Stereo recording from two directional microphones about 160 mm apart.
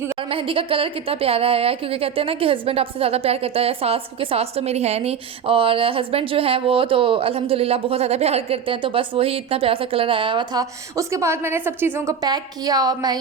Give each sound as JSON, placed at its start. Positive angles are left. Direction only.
{"t": 0.2, "sound": "a woman's voice", "side_deg": -35}